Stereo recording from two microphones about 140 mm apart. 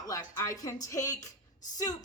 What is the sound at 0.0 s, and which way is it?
Music, 25° left (ahead or behind).